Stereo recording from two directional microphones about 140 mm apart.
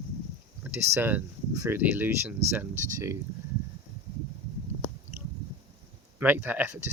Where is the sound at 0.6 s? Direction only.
10° right (ahead or behind).